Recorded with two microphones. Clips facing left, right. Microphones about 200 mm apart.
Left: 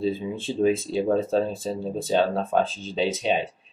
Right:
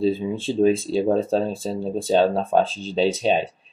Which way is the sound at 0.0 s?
30° right (ahead or behind).